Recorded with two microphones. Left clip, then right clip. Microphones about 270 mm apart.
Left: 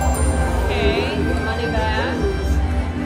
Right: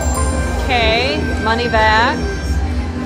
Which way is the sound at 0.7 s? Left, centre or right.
Right.